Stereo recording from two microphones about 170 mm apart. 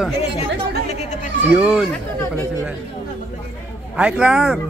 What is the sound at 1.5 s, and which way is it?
Speech, 5° right (ahead or behind).